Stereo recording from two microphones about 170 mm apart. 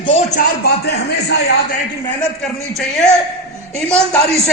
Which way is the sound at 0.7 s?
75° left (ahead or behind).